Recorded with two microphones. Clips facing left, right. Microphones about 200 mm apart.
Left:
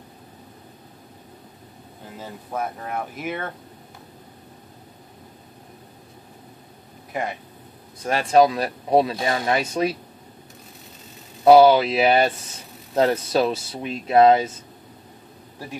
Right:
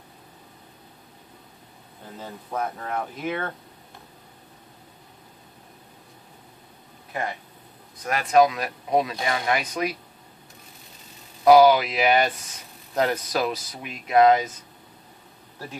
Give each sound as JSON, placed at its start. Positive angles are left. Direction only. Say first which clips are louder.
{"t": 2.1, "sound": "speech", "louder": "left 1 dB", "side_deg": 10}
{"t": 7.1, "sound": "speech", "louder": "left 2 dB", "side_deg": 20}
{"t": 8.0, "sound": "speech", "louder": "left 2 dB", "side_deg": 30}
{"t": 11.4, "sound": "speech", "louder": "left 2 dB", "side_deg": 30}